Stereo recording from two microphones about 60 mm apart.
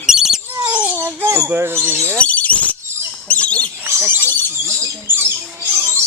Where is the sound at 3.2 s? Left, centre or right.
Left.